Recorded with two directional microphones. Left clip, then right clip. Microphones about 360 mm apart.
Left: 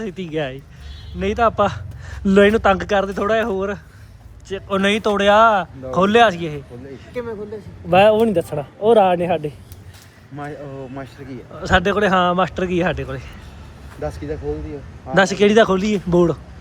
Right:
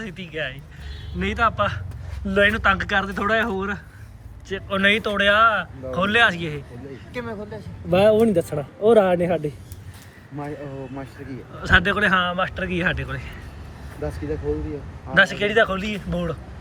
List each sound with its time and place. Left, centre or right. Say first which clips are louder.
0.0 s speech: left 5 dB; centre
7.9 s speech: left 4 dB; centre
11.2 s a man's voice: left 1 dB; left
11.6 s speech: left 1 dB; centre
15.1 s speech: left 4 dB; centre